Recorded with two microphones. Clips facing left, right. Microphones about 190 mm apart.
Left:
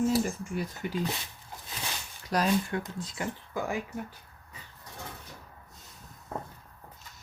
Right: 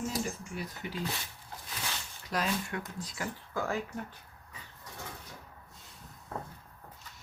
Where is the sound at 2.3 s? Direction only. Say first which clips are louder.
Left 6 dB; 35° left (ahead or behind); by 4.0 s 15° left (ahead or behind).